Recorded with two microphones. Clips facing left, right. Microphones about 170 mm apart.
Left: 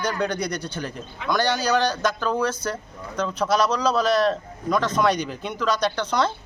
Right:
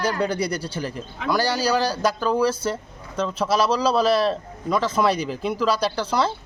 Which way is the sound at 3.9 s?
30° right (ahead or behind).